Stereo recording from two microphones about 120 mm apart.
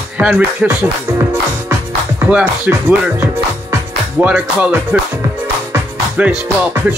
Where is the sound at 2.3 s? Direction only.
15° right (ahead or behind).